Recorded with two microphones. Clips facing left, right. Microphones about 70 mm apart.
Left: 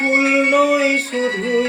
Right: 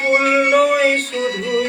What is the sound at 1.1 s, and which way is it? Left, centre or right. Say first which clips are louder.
Music: left 1 dB; left.